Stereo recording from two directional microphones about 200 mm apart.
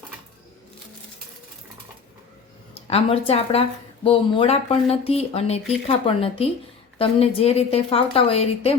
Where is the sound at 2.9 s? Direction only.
30° left (ahead or behind).